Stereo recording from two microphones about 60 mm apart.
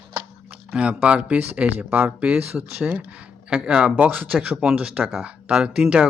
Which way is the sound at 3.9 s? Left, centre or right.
Right.